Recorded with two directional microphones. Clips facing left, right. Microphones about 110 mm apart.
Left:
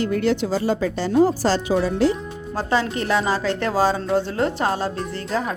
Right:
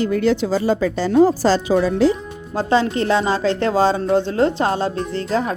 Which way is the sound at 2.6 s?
25° right (ahead or behind).